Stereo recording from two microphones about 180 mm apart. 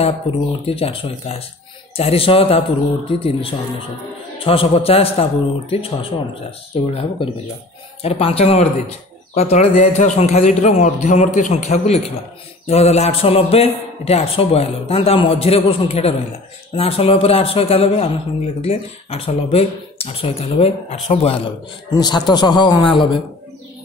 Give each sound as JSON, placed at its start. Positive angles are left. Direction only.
{"t": 0.0, "sound": "a man's voice", "side_deg": 30}
{"t": 21.9, "sound": "a man's voice", "side_deg": 25}